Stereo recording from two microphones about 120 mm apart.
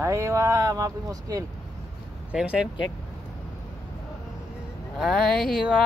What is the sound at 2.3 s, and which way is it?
Speech, 10° right (ahead or behind).